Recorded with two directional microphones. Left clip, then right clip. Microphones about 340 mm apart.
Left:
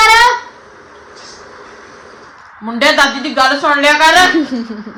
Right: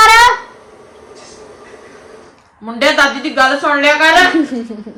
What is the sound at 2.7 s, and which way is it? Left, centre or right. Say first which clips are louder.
A woman's voice: left 1 dB; left.